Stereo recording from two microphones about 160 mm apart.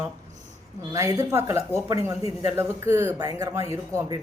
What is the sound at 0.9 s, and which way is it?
Speech, 20° right (ahead or behind).